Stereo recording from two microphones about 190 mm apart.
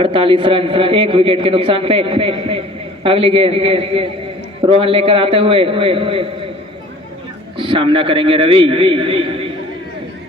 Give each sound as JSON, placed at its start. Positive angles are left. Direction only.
{"t": 0.0, "sound": "a man's voice", "side_deg": -30}
{"t": 7.6, "sound": "a man's voice", "side_deg": -25}